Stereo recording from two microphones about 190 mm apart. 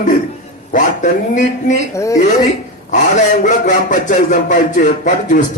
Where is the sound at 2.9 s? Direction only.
40° left (ahead or behind).